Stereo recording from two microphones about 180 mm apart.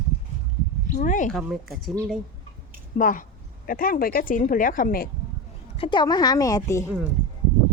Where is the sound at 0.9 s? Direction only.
45° left (ahead or behind).